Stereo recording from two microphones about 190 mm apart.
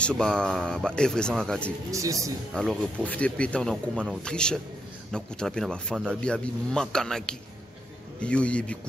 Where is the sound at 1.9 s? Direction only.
15° right (ahead or behind).